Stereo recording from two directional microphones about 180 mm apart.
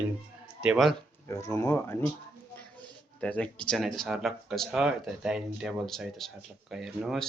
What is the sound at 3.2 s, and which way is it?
Speech, 5° left (ahead or behind).